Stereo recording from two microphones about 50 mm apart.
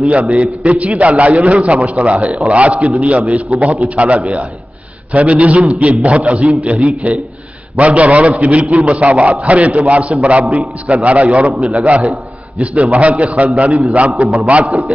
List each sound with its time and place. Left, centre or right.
0.1 s a man's voice: right